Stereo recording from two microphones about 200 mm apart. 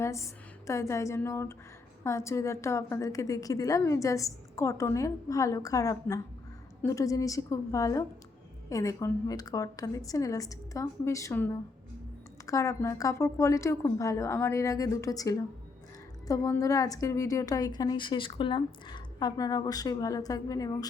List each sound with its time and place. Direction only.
0.0 s a woman's voice: 15° left (ahead or behind)